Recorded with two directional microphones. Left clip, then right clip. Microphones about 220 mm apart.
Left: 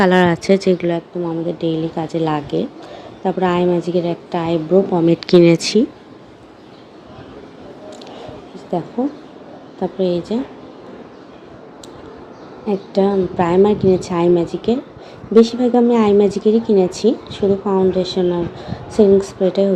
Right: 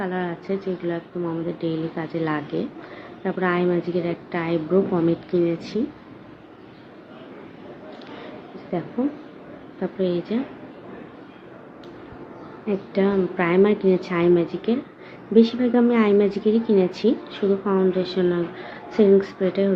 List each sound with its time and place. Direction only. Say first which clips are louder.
0.0 s speech: left 14 dB; 45° left (ahead or behind)
1.5 s a woman's voice: left 7 dB; 20° left (ahead or behind)
5.2 s speech: left 12 dB; 45° left (ahead or behind)
9.8 s a woman's voice: left 6 dB; 15° left (ahead or behind)
12.6 s a woman's voice: left 6 dB; 15° left (ahead or behind)